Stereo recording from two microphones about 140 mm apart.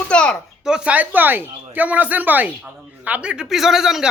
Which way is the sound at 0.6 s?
5° right (ahead or behind).